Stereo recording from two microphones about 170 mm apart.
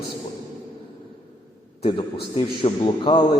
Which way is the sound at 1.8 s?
30° left (ahead or behind).